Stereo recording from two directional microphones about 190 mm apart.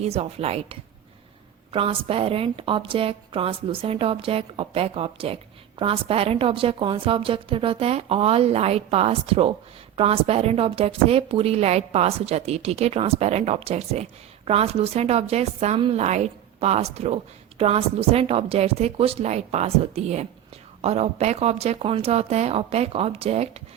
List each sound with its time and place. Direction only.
0.0 s a woman's voice: 30° right (ahead or behind)